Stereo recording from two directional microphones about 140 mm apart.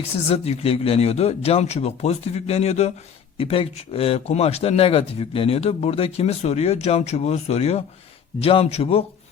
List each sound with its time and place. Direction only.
0.3 s a man's voice: 45° left (ahead or behind)